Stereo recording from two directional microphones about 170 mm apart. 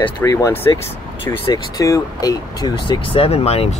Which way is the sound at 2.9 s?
30° left (ahead or behind).